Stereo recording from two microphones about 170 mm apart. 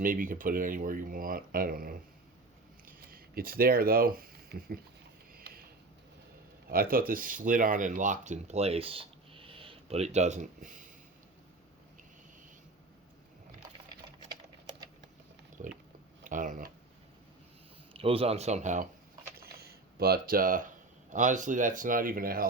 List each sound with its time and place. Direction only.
0.0 s speech: 55° right (ahead or behind)
6.7 s speech: 60° right (ahead or behind)
15.6 s pig: 45° right (ahead or behind)
16.2 s speech: 50° right (ahead or behind)
17.9 s speech: 35° right (ahead or behind)
19.4 s speech: 65° right (ahead or behind)